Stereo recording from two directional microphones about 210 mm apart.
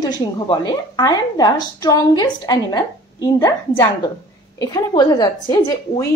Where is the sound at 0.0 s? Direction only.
20° left (ahead or behind).